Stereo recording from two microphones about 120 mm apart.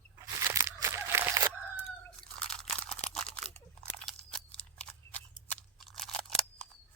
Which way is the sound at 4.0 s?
5° left (ahead or behind).